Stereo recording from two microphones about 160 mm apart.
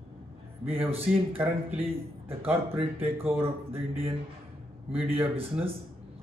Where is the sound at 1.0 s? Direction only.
10° right (ahead or behind).